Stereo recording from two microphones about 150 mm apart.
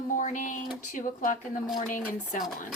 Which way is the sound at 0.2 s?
60° left (ahead or behind).